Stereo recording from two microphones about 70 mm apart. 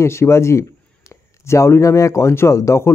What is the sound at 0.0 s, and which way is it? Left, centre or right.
A man's voice, left.